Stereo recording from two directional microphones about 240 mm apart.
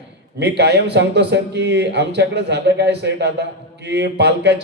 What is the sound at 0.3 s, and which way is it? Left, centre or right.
A man's voice, right.